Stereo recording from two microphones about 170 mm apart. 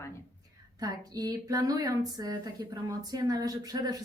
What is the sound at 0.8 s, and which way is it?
Speech, 20° right (ahead or behind).